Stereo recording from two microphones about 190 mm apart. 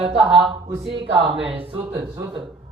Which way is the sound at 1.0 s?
30° right (ahead or behind).